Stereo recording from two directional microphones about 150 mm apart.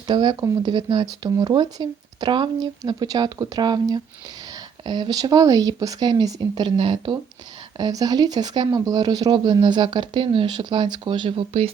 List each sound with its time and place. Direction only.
0.1 s speech: 30° right (ahead or behind)